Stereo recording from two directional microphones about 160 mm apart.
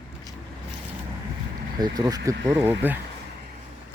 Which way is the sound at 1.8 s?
25° right (ahead or behind).